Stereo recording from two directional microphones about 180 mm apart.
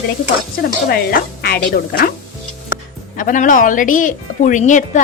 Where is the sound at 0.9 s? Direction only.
60° left (ahead or behind).